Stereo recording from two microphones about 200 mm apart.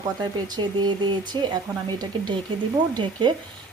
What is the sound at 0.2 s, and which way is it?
Speech, 20° right (ahead or behind).